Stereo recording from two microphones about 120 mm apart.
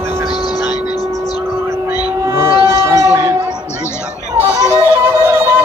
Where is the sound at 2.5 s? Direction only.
35° left (ahead or behind).